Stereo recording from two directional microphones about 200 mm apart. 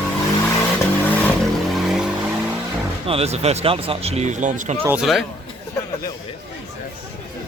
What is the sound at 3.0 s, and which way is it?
Speech, 30° right (ahead or behind).